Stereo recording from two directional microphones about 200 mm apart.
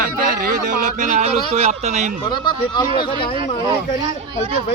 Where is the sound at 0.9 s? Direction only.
35° right (ahead or behind).